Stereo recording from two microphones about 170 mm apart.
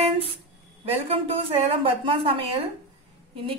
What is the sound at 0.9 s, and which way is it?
A woman's voice, 35° right (ahead or behind).